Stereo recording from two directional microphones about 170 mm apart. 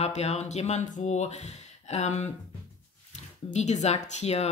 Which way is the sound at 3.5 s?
45° left (ahead or behind).